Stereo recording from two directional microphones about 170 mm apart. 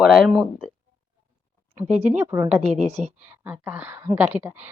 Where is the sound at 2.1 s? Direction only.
15° right (ahead or behind).